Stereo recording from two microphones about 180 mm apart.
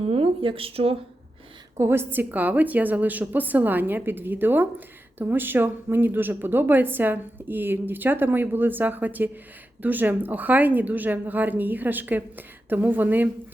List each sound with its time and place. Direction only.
0.0 s speech: 35° right (ahead or behind)
1.8 s a woman's voice: 15° right (ahead or behind)